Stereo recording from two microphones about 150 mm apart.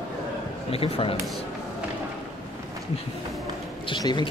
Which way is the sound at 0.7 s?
40° left (ahead or behind).